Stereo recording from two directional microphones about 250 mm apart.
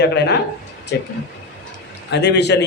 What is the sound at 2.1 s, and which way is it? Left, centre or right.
Speech, left.